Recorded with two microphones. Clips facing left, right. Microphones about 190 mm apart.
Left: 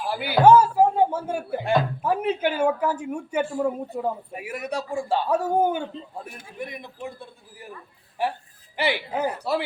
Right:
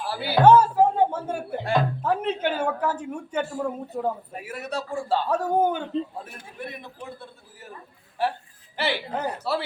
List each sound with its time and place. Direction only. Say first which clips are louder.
0.0 s speech: left 1 dB; 15° left (ahead or behind)